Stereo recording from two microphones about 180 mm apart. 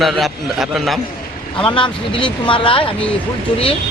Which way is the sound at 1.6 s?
30° left (ahead or behind).